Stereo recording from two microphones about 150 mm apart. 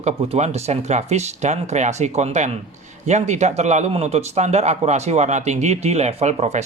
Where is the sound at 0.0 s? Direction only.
45° right (ahead or behind).